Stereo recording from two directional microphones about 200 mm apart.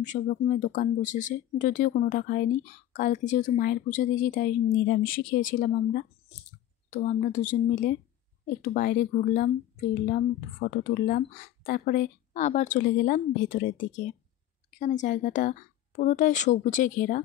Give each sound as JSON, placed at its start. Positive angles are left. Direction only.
{"t": 0.0, "sound": "speech", "side_deg": 40}